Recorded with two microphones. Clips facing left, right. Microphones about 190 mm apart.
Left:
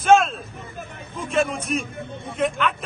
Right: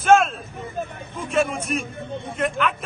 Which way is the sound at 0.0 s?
Centre (ahead or behind).